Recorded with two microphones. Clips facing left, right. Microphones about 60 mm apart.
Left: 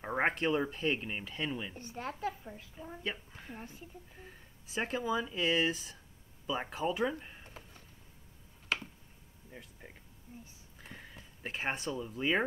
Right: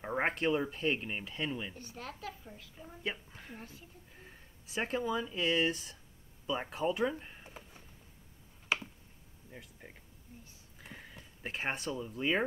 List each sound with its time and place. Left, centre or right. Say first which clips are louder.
0.0 s speech: left 1 dB; centre
1.8 s speech: left 6 dB; left
3.0 s speech: right 2 dB; centre
8.7 s finger snapping: right 1 dB; centre
9.5 s speech: even; centre